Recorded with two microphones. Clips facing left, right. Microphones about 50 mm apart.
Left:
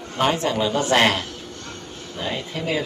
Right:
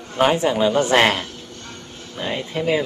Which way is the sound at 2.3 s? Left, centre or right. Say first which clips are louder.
Right 5 dB; right.